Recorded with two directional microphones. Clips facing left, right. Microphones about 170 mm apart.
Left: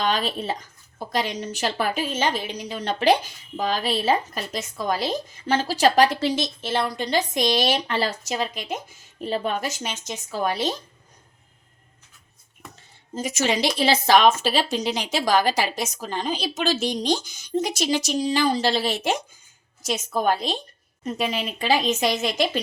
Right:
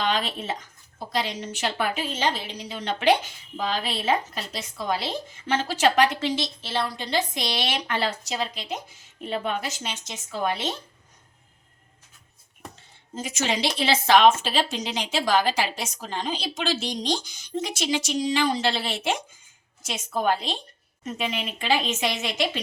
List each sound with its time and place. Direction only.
0.0 s a woman's voice: 40° left (ahead or behind)
13.1 s a woman's voice: 45° left (ahead or behind)